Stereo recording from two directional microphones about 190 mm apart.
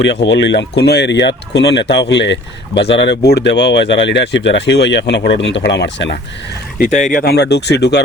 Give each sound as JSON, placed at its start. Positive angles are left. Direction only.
{"t": 0.0, "sound": "speech", "side_deg": 65}
{"t": 2.7, "sound": "speech", "side_deg": 30}
{"t": 3.0, "sound": "speech", "side_deg": 60}
{"t": 6.7, "sound": "speech", "side_deg": 40}